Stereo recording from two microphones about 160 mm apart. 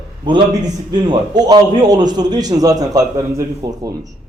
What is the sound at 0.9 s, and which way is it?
A man's voice, 25° right (ahead or behind).